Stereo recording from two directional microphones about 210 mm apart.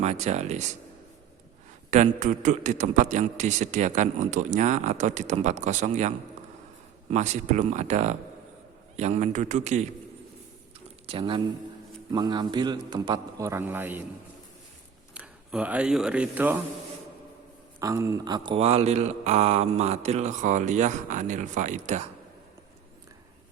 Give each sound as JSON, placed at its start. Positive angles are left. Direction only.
{"t": 0.0, "sound": "a man's voice", "side_deg": -35}
{"t": 1.9, "sound": "a man's voice", "side_deg": -35}
{"t": 11.0, "sound": "a man's voice", "side_deg": -25}
{"t": 15.1, "sound": "speech", "side_deg": -5}
{"t": 17.7, "sound": "a man's voice", "side_deg": -15}